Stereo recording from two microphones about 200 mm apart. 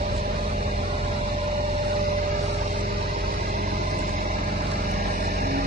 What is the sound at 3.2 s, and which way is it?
Music, 45° right (ahead or behind).